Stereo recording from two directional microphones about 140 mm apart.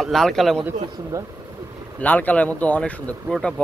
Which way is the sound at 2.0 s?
10° left (ahead or behind).